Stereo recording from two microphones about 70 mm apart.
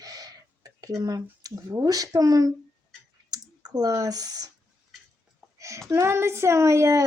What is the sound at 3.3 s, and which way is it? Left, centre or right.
Speech, right.